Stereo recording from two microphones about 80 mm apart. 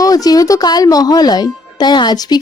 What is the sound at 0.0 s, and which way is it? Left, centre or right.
Speech, left.